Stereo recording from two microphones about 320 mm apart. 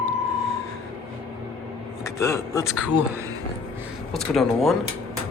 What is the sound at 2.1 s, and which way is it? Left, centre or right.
Speech, centre.